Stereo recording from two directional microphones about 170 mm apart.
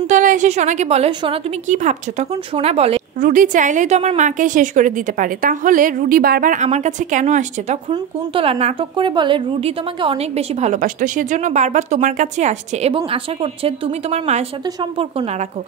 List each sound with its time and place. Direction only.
0.0 s a woman's voice: 45° right (ahead or behind)